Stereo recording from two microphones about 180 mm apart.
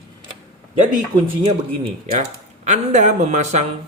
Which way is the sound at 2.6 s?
40° right (ahead or behind).